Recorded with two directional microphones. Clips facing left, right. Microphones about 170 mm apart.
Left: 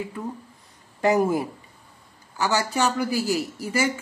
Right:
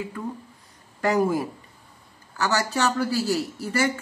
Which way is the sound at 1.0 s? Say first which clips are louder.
Left 1 dB; 20° left (ahead or behind).